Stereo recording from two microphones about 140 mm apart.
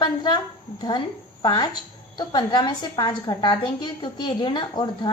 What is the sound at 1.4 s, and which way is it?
A woman's voice, 30° left (ahead or behind).